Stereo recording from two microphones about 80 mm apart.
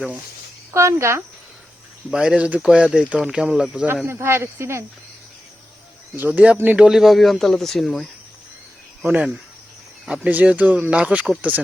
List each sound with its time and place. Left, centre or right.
0.7 s speech: right
2.0 s speech: centre
4.0 s speech: right
6.1 s speech: right; by 8.0 s centre
10.1 s speech: centre